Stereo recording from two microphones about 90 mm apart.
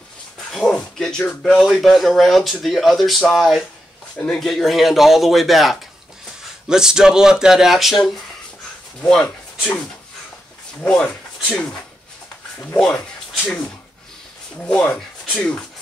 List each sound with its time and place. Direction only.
0.5 s a sound: 5° left (ahead or behind)
1.4 s speech: 5° left (ahead or behind)
9.1 s speech: 10° left (ahead or behind)
10.8 s speech: 10° left (ahead or behind)
13.3 s speech: centre (ahead or behind)
14.6 s speech: 10° left (ahead or behind)